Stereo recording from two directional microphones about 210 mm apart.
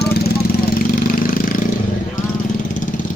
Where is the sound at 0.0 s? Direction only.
50° left (ahead or behind).